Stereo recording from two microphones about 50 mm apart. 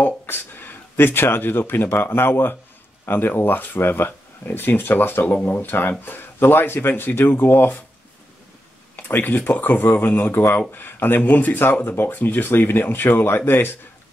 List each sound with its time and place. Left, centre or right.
0.0 s speech: left
5.2 s speech: left
8.9 s speech: left